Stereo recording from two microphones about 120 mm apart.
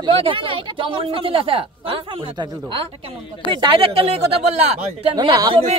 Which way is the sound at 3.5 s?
45° right (ahead or behind).